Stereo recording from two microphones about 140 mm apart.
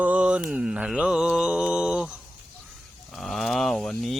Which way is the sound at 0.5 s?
5° right (ahead or behind).